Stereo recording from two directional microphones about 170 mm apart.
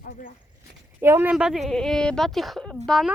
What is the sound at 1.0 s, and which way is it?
A woman's voice, 15° right (ahead or behind).